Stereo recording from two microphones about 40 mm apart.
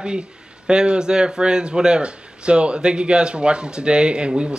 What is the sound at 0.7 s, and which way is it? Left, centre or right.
Speech, right.